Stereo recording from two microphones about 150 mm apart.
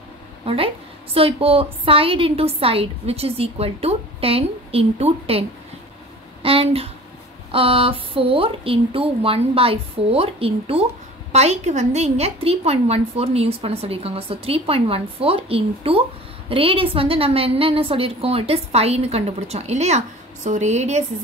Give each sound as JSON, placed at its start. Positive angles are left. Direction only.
{"t": 1.1, "sound": "a woman's voice", "side_deg": -40}
{"t": 6.4, "sound": "a woman's voice", "side_deg": -40}